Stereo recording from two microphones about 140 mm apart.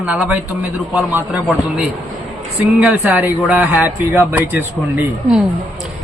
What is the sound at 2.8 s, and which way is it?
Speech, 10° right (ahead or behind).